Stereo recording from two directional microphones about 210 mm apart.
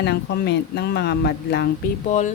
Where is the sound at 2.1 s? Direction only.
35° left (ahead or behind).